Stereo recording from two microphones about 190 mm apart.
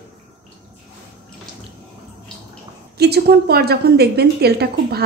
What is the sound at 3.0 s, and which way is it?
A woman's voice, 60° right (ahead or behind).